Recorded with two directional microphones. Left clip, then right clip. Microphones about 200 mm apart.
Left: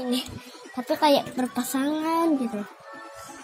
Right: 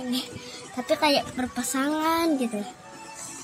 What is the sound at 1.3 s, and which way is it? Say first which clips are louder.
Speech: left 1 dB; centre (ahead or behind).